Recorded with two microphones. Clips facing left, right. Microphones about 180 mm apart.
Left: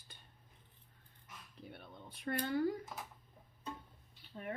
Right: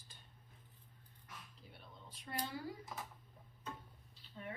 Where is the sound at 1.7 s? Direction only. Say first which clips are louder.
Left 6 dB; 60° left (ahead or behind).